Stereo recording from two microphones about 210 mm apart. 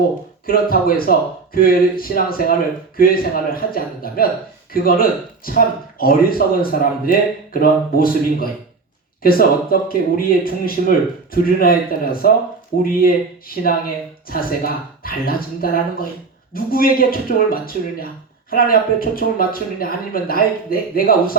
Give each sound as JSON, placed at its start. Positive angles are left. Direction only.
{"t": 0.4, "sound": "speech", "side_deg": 45}